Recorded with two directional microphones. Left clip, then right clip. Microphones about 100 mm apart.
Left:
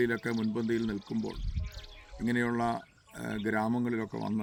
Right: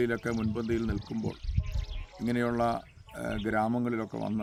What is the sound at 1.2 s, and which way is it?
Pour, 30° right (ahead or behind).